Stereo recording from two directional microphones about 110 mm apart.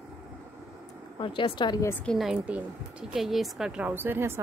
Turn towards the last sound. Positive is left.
turn(degrees=-20)  # may be behind; listen again after turning